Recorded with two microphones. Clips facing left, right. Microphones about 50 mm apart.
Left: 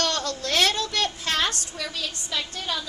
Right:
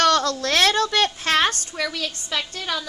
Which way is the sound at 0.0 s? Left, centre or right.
Right.